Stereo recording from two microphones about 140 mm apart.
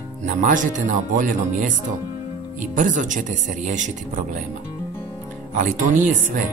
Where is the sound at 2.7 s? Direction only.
65° right (ahead or behind).